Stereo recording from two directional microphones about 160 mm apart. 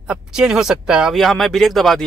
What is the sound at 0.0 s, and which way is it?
Speech, 5° right (ahead or behind).